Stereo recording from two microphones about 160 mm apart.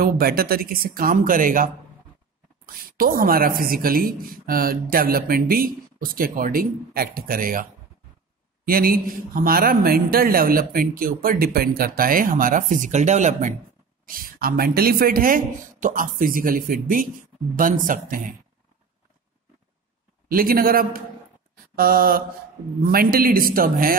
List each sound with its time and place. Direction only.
0.0 s speech: 70° right (ahead or behind)
8.6 s speech: 65° right (ahead or behind)
14.0 s speech: 65° right (ahead or behind)
20.2 s speech: 65° right (ahead or behind)
21.7 s mantra: 65° right (ahead or behind)
22.8 s speech: 65° right (ahead or behind)